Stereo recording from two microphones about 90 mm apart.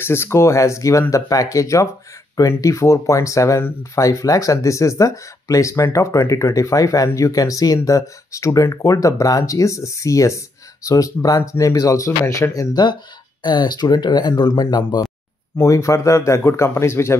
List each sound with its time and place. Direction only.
0.0 s speech: 25° left (ahead or behind)
13.4 s speech: 55° left (ahead or behind)
15.6 s speech: 35° left (ahead or behind)